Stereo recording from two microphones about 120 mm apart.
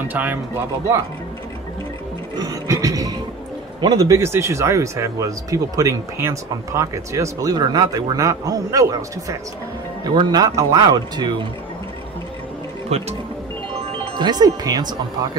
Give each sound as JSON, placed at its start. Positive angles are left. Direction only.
{"t": 0.0, "sound": "speech", "side_deg": -15}
{"t": 2.3, "sound": "music", "side_deg": -30}
{"t": 3.8, "sound": "speech", "side_deg": -30}
{"t": 12.9, "sound": "speech", "side_deg": -65}
{"t": 14.1, "sound": "speech", "side_deg": -35}